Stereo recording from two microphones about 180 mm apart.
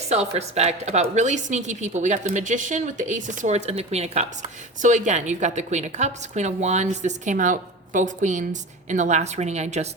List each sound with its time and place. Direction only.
0.1 s a woman's voice: 35° right (ahead or behind)